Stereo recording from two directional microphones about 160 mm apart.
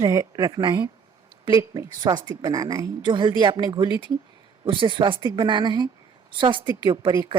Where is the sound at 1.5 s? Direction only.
15° right (ahead or behind).